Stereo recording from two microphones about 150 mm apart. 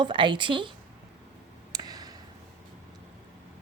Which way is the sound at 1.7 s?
25° right (ahead or behind).